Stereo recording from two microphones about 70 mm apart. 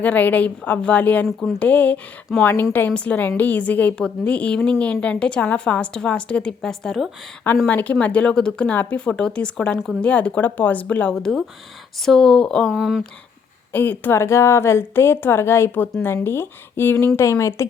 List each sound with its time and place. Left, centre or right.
0.0 s a woman's voice: left
2.9 s a woman's voice: centre
7.4 s a woman's voice: left; by 8.7 s centre
8.7 s a woman's voice: left
9.7 s speech: centre
10.0 s a woman's voice: centre
11.2 s a woman's voice: centre
12.7 s speech: centre
13.7 s a woman's voice: left
14.1 s a woman's voice: left